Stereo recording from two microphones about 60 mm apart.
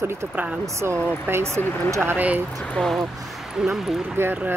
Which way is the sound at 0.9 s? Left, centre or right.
Left.